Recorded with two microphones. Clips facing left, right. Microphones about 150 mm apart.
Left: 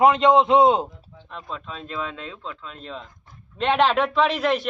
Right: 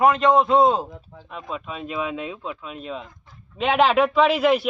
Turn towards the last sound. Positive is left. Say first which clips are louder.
# right 3 dB
turn(degrees=-5)  # may be behind; listen again after turning